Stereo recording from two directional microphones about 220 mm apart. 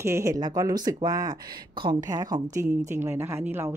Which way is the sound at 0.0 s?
15° right (ahead or behind).